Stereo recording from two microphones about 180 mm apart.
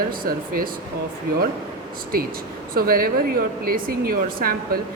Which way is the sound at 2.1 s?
55° right (ahead or behind).